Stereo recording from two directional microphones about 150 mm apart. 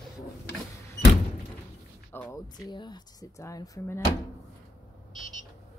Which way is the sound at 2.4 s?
30° left (ahead or behind).